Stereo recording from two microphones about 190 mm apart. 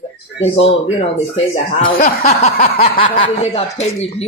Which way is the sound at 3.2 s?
35° left (ahead or behind).